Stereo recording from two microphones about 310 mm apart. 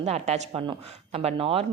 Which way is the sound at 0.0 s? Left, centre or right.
Right.